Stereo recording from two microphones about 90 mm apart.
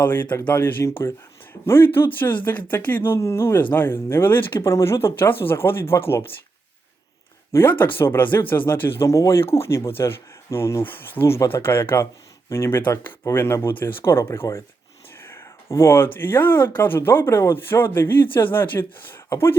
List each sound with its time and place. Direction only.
0.0 s speech: 20° left (ahead or behind)
7.5 s speech: 20° left (ahead or behind)
15.2 s a sound: 30° left (ahead or behind)
16.2 s speech: 20° left (ahead or behind)